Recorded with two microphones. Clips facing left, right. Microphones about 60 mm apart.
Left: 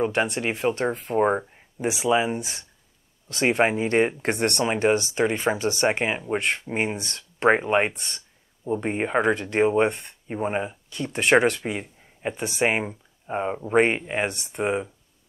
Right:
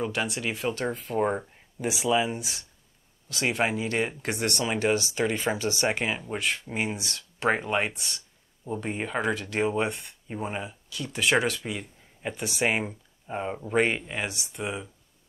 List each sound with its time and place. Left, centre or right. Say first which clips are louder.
0.0 s speech: left 6 dB; left
7.9 s speech: left 1 dB; left
8.6 s speech: left 6 dB; left
12.2 s speech: left 4 dB; centre
14.3 s speech: left 8 dB; left